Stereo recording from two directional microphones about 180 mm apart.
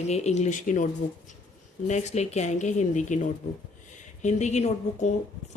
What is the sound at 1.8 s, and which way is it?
Speech, 40° left (ahead or behind).